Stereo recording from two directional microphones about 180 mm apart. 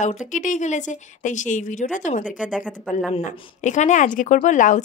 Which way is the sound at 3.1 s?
40° left (ahead or behind).